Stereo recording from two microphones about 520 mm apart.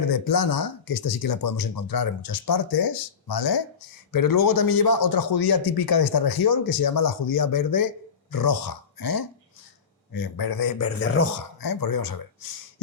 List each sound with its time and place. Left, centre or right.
0.1 s speech: left
11.6 s speech: left